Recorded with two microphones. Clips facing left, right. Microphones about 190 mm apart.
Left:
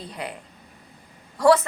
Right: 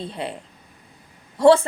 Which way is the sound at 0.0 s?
25° right (ahead or behind).